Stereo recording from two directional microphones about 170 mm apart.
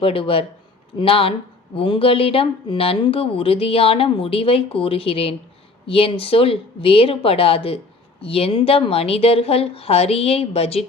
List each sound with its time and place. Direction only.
0.0 s speech: 35° left (ahead or behind)